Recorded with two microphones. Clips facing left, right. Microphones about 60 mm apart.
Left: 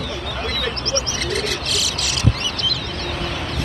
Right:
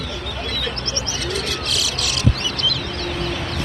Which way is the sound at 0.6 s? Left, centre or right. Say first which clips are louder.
Left 3 dB; left.